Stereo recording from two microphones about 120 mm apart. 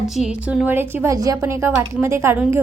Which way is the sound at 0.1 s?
5° right (ahead or behind).